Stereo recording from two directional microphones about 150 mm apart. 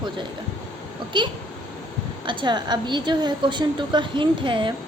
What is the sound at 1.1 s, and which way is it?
A woman's voice, 30° right (ahead or behind).